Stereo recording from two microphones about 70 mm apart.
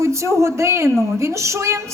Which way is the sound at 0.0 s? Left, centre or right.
Right.